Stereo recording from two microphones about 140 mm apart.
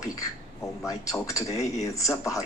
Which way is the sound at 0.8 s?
25° left (ahead or behind).